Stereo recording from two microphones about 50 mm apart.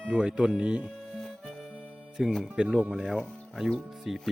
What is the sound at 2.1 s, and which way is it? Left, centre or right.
Speech, centre.